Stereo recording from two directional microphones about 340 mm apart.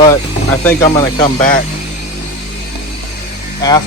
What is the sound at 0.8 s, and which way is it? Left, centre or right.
Speech, centre.